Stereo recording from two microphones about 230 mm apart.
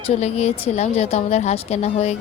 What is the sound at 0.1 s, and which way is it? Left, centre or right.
Speech, left.